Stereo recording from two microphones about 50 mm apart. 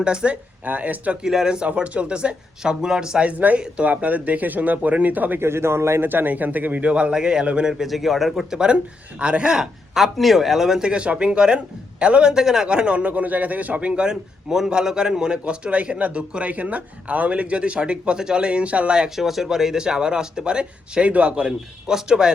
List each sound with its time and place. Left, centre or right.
0.0 s a man's voice: centre
0.6 s speech: right
1.2 s speech: centre
3.2 s speech: right
5.4 s a man's voice: right
6.1 s a man's voice: right; by 7.7 s centre
7.7 s a man's voice: centre
8.5 s a man's voice: centre
9.9 s a man's voice: centre